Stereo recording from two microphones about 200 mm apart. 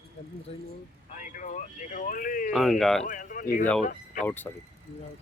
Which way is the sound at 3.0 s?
40° left (ahead or behind).